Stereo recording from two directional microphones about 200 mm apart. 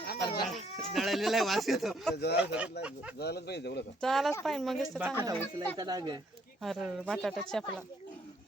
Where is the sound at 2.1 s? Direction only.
55° left (ahead or behind).